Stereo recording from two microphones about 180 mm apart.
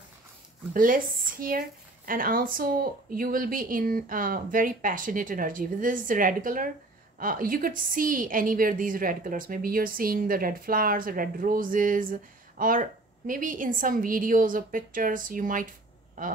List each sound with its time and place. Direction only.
0.7 s speech: 50° right (ahead or behind)